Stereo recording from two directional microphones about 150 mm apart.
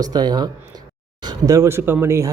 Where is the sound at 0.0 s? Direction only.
25° right (ahead or behind).